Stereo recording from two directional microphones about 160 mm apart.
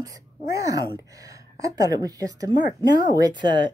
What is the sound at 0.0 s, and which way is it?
Speech, 20° right (ahead or behind).